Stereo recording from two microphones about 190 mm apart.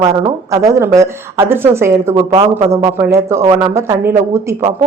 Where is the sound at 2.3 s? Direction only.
30° right (ahead or behind).